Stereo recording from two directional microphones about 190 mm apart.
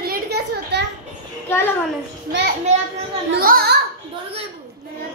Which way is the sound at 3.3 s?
50° right (ahead or behind).